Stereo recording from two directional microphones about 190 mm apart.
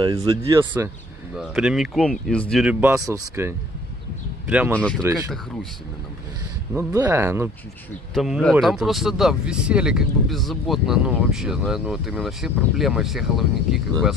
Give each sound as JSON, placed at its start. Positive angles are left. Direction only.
{"t": 0.0, "sound": "speech", "side_deg": -25}
{"t": 1.4, "sound": "speech", "side_deg": -5}
{"t": 2.6, "sound": "speech", "side_deg": -10}
{"t": 4.7, "sound": "speech", "side_deg": 5}
{"t": 6.7, "sound": "speech", "side_deg": -15}
{"t": 8.1, "sound": "speech", "side_deg": 0}